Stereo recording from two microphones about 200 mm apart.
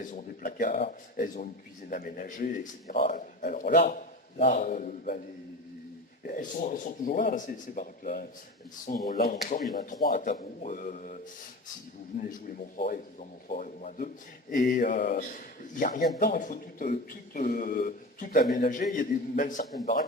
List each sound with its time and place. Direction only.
0.0 s a man's voice: 40° left (ahead or behind)
0.7 s a man's voice: 30° left (ahead or behind)
1.1 s a man's voice: 40° left (ahead or behind)
3.8 s a man's voice: 30° left (ahead or behind)
6.2 s a man's voice: 45° left (ahead or behind)
12.9 s a man's voice: 40° left (ahead or behind)